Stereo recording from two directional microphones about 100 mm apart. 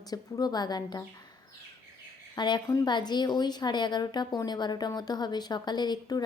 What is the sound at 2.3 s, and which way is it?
A woman's voice, 50° left (ahead or behind).